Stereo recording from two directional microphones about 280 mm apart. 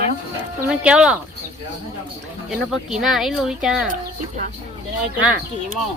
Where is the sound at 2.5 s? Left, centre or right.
Centre.